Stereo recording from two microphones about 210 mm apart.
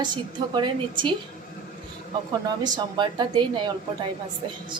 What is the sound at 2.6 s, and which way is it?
Speech, 20° right (ahead or behind).